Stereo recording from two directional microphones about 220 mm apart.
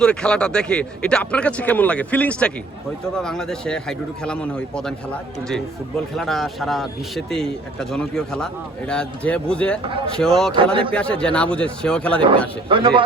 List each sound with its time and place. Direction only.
0.0 s speech: 5° left (ahead or behind)
6.1 s speech: centre (ahead or behind)
10.5 s a man's voice: 25° right (ahead or behind)
10.9 s speech: 5° left (ahead or behind)
12.6 s a man's voice: 20° right (ahead or behind)